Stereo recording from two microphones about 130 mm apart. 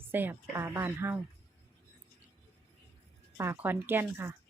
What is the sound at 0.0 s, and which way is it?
Speech, 15° right (ahead or behind).